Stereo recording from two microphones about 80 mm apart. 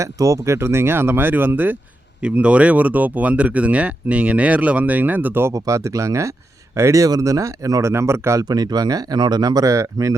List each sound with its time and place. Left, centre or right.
0.0 s speech: right
5.5 s speech: right
8.4 s speech: right